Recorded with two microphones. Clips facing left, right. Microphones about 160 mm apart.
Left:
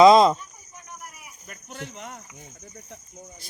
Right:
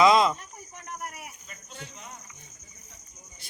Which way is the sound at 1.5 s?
70° left (ahead or behind).